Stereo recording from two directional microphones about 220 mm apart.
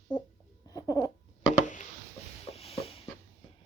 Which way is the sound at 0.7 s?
15° left (ahead or behind).